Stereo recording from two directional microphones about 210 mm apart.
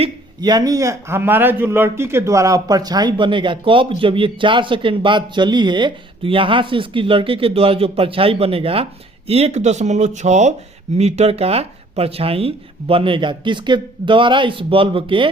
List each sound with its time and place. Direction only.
0.0 s a man's voice: 20° right (ahead or behind)